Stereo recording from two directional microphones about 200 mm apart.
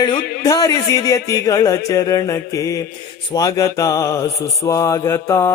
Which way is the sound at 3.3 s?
20° left (ahead or behind).